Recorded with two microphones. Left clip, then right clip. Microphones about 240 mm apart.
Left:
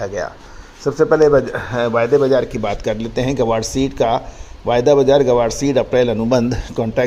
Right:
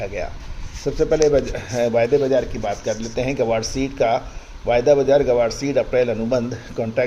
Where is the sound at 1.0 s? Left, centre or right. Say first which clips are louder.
Left 5 dB; centre.